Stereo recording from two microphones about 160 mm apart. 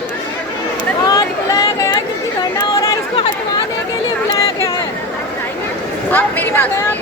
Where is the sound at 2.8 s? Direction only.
30° left (ahead or behind).